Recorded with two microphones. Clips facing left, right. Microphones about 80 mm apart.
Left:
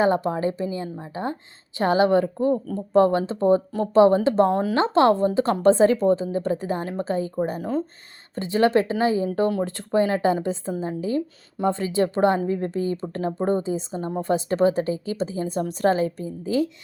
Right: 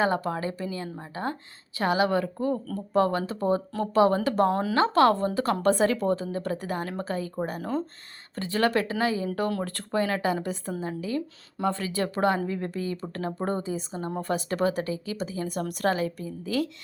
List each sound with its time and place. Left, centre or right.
0.0 s speech: left
7.6 s speech: centre
8.4 s speech: left